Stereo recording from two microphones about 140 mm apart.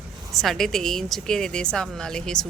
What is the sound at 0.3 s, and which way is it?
A woman's voice, centre (ahead or behind).